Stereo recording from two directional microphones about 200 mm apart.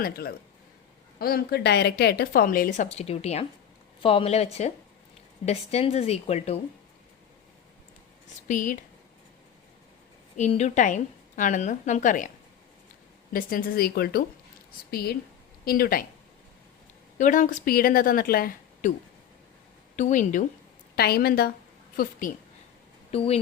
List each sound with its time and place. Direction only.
0.0 s a woman's voice: 50° left (ahead or behind)
2.9 s a woman's voice: 30° left (ahead or behind)
5.5 s a woman's voice: 30° left (ahead or behind)
8.4 s a woman's voice: 40° left (ahead or behind)
10.3 s a woman's voice: 35° left (ahead or behind)
13.3 s a woman's voice: 45° left (ahead or behind)
17.2 s a woman's voice: 40° left (ahead or behind)
20.0 s a woman's voice: 40° left (ahead or behind)
20.9 s a woman's voice: 50° left (ahead or behind)
23.1 s a woman's voice: 30° left (ahead or behind)